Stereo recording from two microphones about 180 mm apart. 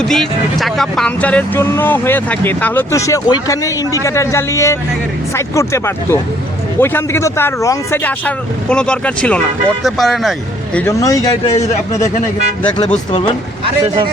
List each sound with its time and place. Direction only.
0.0 s speech: centre (ahead or behind)
10.8 s a man's voice: 15° left (ahead or behind)
12.6 s a man's voice: 25° left (ahead or behind)